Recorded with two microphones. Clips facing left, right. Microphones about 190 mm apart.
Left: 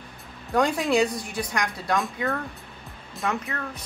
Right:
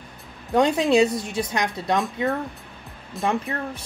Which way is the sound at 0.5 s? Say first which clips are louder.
Right 4 dB; 20° right (ahead or behind).